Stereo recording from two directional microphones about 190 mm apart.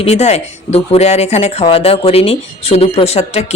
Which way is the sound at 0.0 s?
35° left (ahead or behind).